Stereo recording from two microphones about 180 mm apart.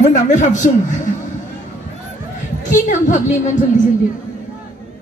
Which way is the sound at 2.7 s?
45° left (ahead or behind).